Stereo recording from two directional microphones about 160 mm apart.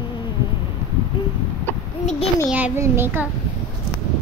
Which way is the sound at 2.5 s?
15° right (ahead or behind).